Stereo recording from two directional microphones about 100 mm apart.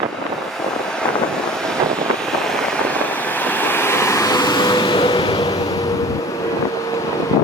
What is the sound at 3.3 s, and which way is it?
Vehicle, 20° left (ahead or behind).